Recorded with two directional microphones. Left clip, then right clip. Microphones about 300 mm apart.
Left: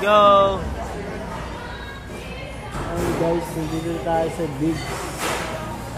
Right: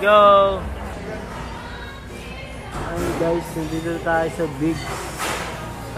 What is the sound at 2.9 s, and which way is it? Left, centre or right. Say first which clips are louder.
Speech: even; centre.